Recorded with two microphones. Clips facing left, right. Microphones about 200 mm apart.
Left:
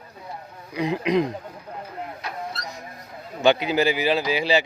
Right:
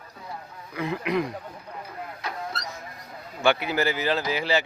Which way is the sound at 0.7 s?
20° left (ahead or behind).